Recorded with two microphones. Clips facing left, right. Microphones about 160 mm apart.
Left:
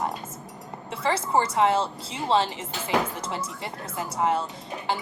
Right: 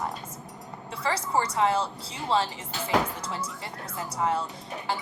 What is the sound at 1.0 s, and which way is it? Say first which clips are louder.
A woman's voice: left 3 dB; 25° left (ahead or behind).